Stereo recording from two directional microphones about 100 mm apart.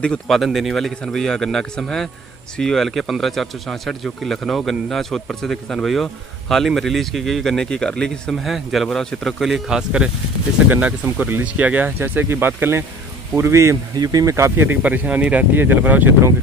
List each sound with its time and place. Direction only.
0.0 s speech: 5° left (ahead or behind); by 14.8 s 30° right (ahead or behind)
14.8 s speech: 15° right (ahead or behind)